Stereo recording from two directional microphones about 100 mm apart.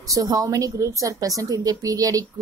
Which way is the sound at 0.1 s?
40° right (ahead or behind).